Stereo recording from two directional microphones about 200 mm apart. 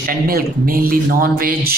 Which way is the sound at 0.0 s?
50° right (ahead or behind).